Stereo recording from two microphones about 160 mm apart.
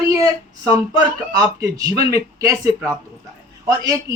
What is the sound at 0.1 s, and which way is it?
Speech, 20° right (ahead or behind).